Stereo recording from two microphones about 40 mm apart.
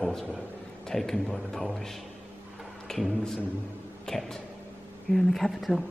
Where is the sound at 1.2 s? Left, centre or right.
Left.